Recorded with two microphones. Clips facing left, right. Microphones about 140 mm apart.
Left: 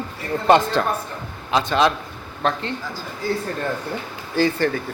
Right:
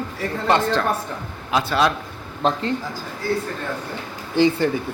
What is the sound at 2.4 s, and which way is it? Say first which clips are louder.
Speech: right 2 dB; 35° right (ahead or behind).